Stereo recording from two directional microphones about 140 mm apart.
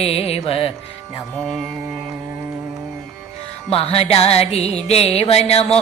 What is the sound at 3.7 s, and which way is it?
Music, 45° left (ahead or behind).